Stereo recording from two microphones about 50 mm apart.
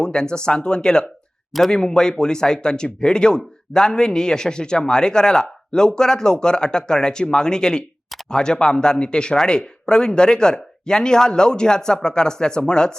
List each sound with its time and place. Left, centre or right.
0.0 s speech: centre